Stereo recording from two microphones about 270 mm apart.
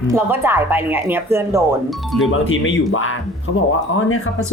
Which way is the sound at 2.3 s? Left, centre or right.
Left.